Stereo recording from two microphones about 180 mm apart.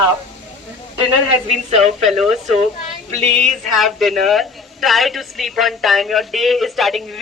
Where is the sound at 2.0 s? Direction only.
Centre (ahead or behind).